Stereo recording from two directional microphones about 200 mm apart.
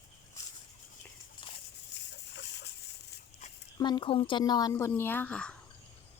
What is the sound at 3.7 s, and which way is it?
Speech, 20° left (ahead or behind).